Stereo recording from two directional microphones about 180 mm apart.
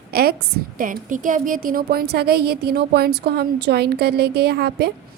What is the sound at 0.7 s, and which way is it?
A woman's voice, 50° right (ahead or behind).